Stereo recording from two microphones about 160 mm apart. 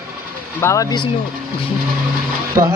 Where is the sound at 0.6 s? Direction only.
15° left (ahead or behind).